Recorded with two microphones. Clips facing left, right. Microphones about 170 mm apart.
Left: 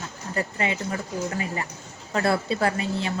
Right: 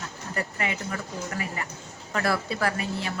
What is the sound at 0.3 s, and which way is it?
Speech, 25° left (ahead or behind).